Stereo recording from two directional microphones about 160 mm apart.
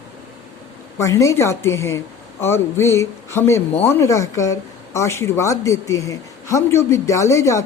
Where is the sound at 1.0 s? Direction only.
20° left (ahead or behind).